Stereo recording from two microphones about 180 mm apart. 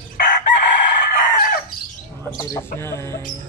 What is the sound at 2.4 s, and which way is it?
Speech, 15° left (ahead or behind).